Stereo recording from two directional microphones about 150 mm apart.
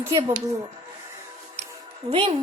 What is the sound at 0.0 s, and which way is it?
Speech, 20° right (ahead or behind).